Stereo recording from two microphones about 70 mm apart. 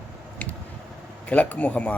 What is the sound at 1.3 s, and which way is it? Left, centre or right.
Speech, left.